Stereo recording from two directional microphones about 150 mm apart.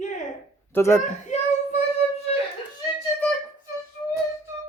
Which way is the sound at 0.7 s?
15° left (ahead or behind).